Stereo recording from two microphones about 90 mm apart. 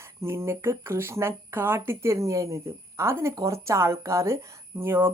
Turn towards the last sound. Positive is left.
turn(degrees=-25)  # may be behind; listen again after turning